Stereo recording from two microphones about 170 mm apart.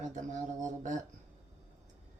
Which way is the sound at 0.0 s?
45° right (ahead or behind).